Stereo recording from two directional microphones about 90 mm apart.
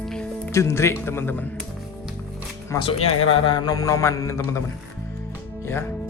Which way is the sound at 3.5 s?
45° left (ahead or behind).